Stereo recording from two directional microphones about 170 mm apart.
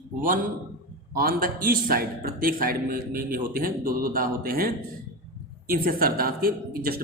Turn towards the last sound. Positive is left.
turn(degrees=-60)  # may be behind; listen again after turning